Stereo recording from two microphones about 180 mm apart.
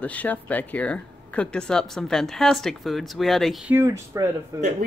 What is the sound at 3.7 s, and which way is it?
Speech, 15° right (ahead or behind).